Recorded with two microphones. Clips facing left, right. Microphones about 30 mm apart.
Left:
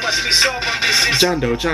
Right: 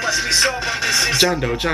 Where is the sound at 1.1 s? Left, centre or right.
Centre.